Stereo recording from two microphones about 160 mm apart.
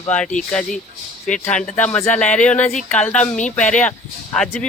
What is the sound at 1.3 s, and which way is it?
Speech, 5° left (ahead or behind).